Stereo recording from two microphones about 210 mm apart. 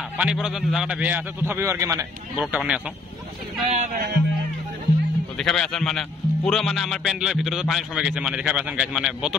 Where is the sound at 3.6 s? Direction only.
30° right (ahead or behind).